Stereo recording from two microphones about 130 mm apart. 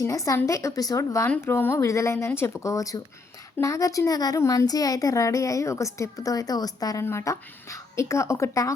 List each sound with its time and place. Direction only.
0.0 s a woman's voice: 25° left (ahead or behind)